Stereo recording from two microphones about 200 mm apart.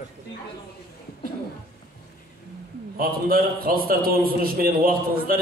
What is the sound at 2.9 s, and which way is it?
A man's voice, 45° right (ahead or behind).